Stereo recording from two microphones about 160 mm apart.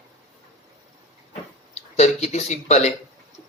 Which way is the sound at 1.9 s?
45° left (ahead or behind).